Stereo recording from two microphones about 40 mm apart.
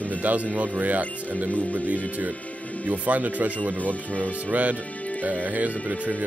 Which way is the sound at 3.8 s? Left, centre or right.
Left.